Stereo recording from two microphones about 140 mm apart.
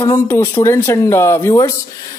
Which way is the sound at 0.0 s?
20° left (ahead or behind).